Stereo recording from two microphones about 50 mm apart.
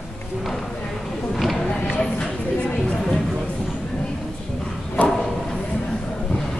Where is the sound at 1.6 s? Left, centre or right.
Left.